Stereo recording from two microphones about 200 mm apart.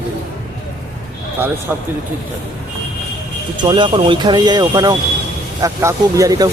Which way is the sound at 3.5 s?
25° right (ahead or behind).